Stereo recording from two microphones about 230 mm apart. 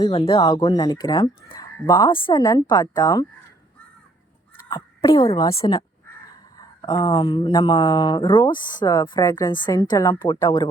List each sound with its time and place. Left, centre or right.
0.0 s speech: left
4.7 s speech: centre